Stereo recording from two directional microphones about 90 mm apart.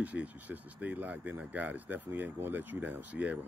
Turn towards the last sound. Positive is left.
turn(degrees=-15)  # may be behind; listen again after turning